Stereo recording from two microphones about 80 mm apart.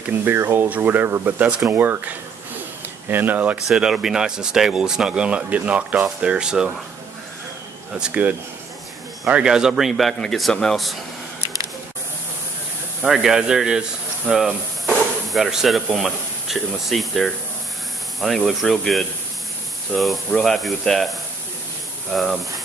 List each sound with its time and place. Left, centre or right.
0.2 s speech: right
3.6 s speech: centre
7.9 s speech: centre
13.0 s speech: centre